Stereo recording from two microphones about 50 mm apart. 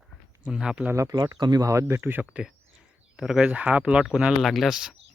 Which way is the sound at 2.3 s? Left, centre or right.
Right.